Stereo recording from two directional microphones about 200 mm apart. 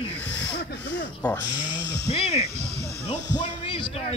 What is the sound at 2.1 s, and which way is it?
Speech, 30° left (ahead or behind).